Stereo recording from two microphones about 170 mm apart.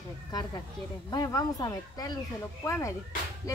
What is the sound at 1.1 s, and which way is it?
A child's voice, 20° left (ahead or behind).